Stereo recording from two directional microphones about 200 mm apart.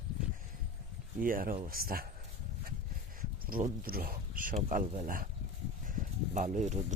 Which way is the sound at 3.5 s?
45° right (ahead or behind).